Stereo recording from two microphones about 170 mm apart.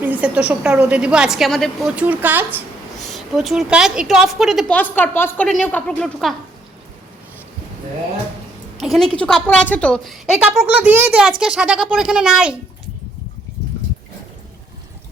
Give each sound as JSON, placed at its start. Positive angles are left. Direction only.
{"t": 0.0, "sound": "a woman's voice", "side_deg": -10}
{"t": 2.0, "sound": "a woman's voice", "side_deg": -10}
{"t": 3.0, "sound": "a woman's voice", "side_deg": 0}
{"t": 4.8, "sound": "a woman's voice", "side_deg": 10}
{"t": 8.8, "sound": "a woman's voice", "side_deg": 0}